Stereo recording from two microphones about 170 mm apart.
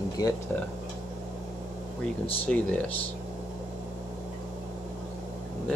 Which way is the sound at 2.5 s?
5° left (ahead or behind).